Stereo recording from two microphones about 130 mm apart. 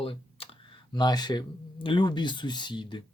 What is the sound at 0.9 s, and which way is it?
Speech, 30° left (ahead or behind).